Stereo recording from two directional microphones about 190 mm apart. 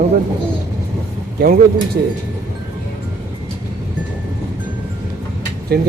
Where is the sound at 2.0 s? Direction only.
55° right (ahead or behind).